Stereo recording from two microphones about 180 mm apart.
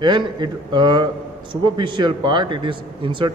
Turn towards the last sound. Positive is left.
turn(degrees=-25)  # may be behind; listen again after turning